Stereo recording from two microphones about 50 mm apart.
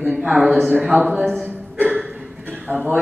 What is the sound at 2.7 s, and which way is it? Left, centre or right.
Speech, right.